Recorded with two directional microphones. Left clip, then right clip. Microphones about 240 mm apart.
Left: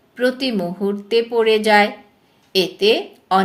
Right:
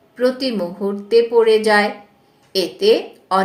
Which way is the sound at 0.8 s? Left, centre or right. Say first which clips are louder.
Right 3 dB; left.